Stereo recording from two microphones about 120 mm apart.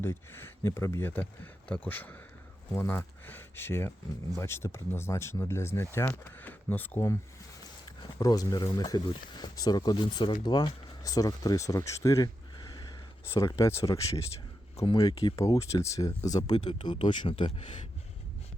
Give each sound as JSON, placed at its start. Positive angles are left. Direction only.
{"t": 0.0, "sound": "speech", "side_deg": 20}
{"t": 7.9, "sound": "speech", "side_deg": 35}